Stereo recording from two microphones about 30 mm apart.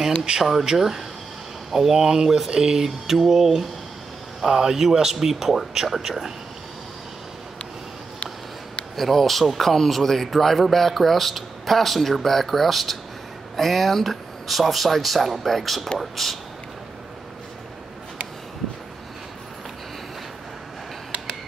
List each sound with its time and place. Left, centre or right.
0.2 s a sound: centre
0.7 s speech: centre
2.0 s speech: right
2.2 s speech: centre
2.5 s speech: right
8.9 s a man's voice: centre